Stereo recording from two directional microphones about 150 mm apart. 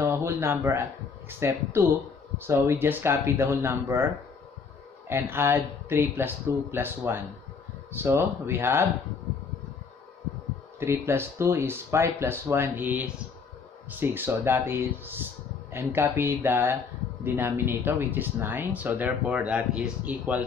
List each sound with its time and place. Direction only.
0.0 s speech: 20° right (ahead or behind)
10.8 s speech: 15° right (ahead or behind)